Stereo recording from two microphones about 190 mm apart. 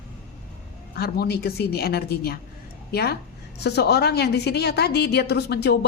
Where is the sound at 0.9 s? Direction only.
55° left (ahead or behind).